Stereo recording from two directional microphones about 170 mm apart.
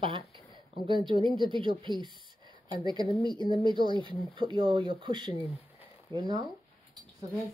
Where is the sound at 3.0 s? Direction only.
30° left (ahead or behind).